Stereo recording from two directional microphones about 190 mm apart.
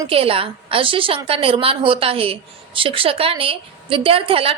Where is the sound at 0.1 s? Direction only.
30° right (ahead or behind).